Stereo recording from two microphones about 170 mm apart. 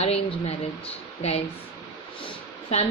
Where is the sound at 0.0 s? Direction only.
35° left (ahead or behind).